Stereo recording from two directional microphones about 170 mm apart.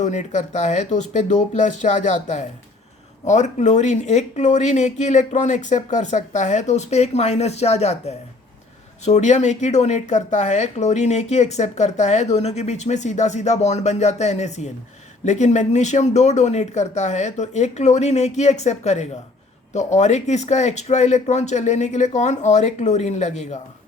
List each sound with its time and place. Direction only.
0.0 s speech: 45° left (ahead or behind)